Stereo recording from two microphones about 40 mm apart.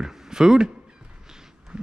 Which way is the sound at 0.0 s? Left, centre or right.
Centre.